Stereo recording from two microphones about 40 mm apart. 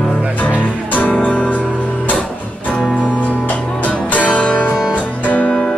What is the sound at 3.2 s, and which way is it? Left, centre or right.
Music, left.